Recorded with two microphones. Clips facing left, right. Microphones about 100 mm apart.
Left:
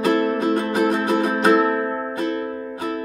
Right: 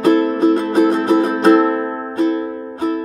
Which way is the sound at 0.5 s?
30° right (ahead or behind).